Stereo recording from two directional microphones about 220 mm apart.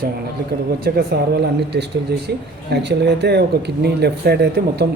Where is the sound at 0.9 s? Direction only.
45° right (ahead or behind).